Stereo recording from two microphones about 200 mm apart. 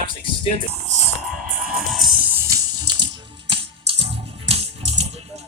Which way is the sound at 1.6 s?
Centre (ahead or behind).